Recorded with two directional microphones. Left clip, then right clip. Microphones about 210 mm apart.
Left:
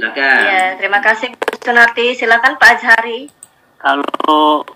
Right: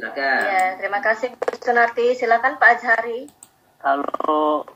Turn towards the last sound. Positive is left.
turn(degrees=50)  # may be behind; listen again after turning